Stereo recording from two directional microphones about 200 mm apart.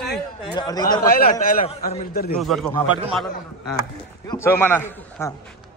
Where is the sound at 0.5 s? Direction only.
20° left (ahead or behind).